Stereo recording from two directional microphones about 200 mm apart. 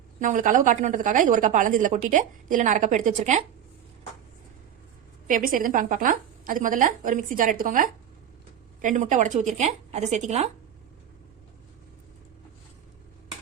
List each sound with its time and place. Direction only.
0.2 s a woman's voice: 40° right (ahead or behind)
5.3 s a woman's voice: 45° right (ahead or behind)